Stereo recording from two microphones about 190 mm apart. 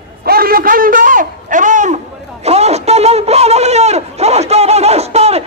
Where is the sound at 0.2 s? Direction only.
50° right (ahead or behind).